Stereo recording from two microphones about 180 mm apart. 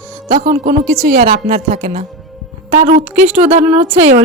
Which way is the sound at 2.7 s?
40° right (ahead or behind).